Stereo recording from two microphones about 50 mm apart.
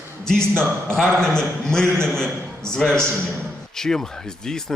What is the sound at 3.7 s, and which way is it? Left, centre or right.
A man's voice, centre.